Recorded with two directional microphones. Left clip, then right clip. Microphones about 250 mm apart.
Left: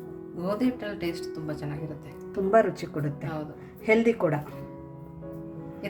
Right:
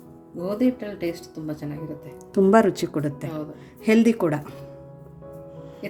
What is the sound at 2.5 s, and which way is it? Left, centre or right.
A woman's voice, right.